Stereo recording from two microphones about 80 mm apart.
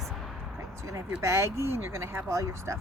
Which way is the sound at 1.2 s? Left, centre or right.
Right.